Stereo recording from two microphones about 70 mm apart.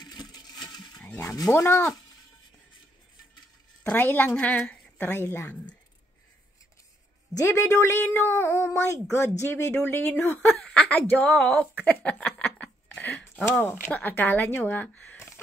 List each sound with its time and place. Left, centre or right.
0.0 s a sound: left
1.3 s speech: left
1.6 s speech: left
3.9 s speech: left
5.2 s speech: left
7.3 s speech: left
10.4 s speech: centre
12.8 s a sound: left
13.5 s speech: left